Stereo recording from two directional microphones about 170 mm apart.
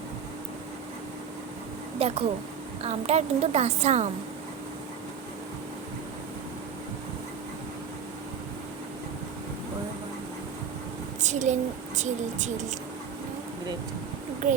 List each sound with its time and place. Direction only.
2.0 s a woman's voice: 35° right (ahead or behind)
11.2 s a woman's voice: 45° right (ahead or behind)